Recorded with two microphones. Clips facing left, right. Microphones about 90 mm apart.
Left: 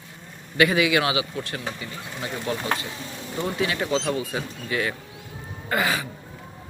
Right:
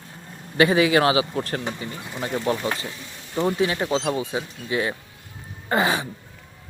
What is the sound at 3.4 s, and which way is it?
Speech, 30° right (ahead or behind).